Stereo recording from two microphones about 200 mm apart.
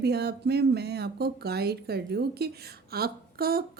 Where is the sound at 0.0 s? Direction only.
55° right (ahead or behind).